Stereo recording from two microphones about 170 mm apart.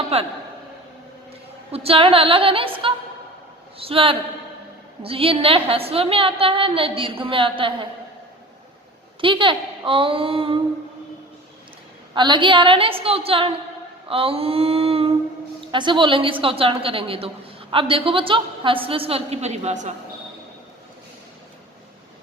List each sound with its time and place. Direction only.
0.1 s a woman's voice: 35° right (ahead or behind)
1.7 s a woman's voice: 35° right (ahead or behind)
9.2 s a woman's voice: 30° right (ahead or behind)
12.1 s a woman's voice: 25° right (ahead or behind); by 19.9 s 45° right (ahead or behind)